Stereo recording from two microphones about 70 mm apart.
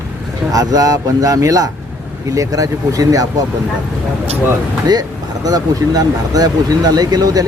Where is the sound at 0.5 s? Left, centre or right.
Right.